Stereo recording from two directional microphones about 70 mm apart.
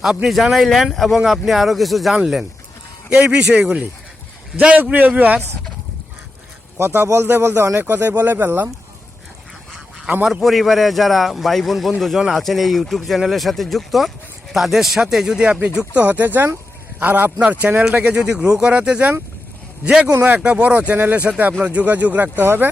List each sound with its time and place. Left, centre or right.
0.0 s a man's voice: centre
3.2 s speech: centre
6.7 s a man's voice: right
10.4 s a man's voice: centre
16.0 s speech: right